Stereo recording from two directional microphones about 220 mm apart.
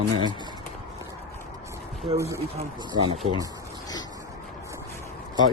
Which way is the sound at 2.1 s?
15° right (ahead or behind).